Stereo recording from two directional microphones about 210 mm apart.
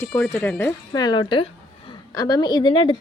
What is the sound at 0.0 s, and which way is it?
A woman's voice, 15° left (ahead or behind).